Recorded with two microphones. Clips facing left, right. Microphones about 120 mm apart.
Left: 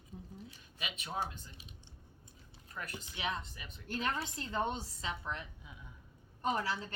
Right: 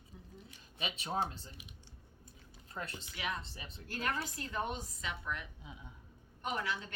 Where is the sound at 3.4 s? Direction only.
30° right (ahead or behind).